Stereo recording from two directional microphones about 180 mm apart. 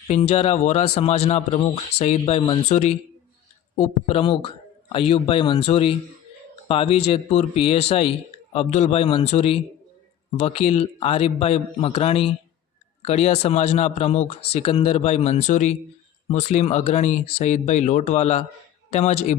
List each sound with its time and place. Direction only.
0.1 s speech: 35° left (ahead or behind)